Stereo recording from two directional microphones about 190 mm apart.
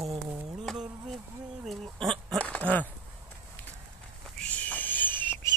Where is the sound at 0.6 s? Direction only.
5° right (ahead or behind).